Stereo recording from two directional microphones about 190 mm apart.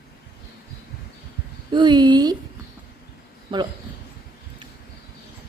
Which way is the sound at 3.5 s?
25° right (ahead or behind).